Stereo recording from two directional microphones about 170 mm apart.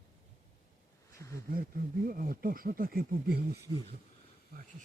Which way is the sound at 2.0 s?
60° right (ahead or behind).